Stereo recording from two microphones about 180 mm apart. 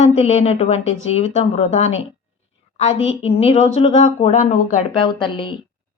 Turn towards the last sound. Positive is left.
turn(degrees=25)  # may be behind; listen again after turning